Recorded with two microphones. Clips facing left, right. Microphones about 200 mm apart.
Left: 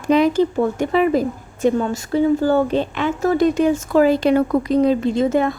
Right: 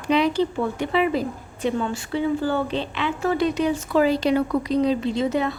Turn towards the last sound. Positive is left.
turn(degrees=50)  # may be behind; listen again after turning